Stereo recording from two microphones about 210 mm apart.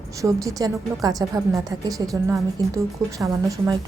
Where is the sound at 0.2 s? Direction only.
15° right (ahead or behind).